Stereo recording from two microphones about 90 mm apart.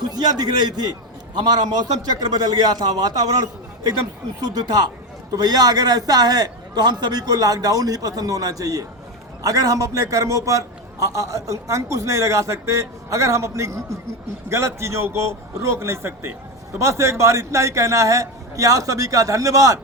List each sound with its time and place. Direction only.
0.0 s a man's voice: 50° right (ahead or behind)